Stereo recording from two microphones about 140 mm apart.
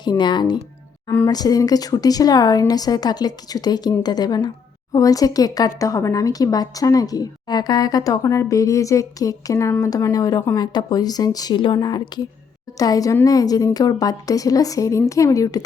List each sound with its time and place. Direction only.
0.0 s a woman's voice: 30° left (ahead or behind)